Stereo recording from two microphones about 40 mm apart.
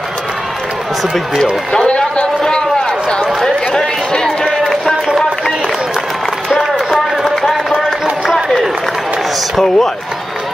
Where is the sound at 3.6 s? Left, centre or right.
Left.